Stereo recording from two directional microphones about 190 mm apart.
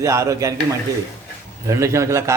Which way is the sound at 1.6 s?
15° right (ahead or behind).